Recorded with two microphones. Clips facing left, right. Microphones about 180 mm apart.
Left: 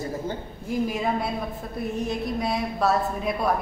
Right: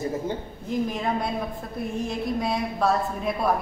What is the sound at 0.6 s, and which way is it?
A woman's voice, 5° left (ahead or behind).